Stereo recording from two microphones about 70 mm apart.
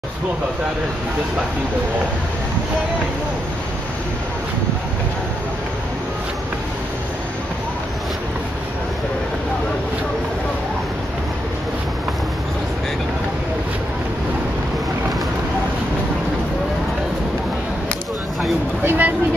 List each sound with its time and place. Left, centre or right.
18.9 s a woman's voice: right